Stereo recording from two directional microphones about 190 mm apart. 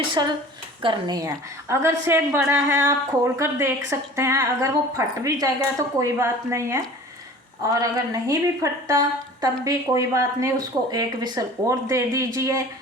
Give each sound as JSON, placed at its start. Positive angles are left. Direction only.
{"t": 0.1, "sound": "a woman's voice", "side_deg": -20}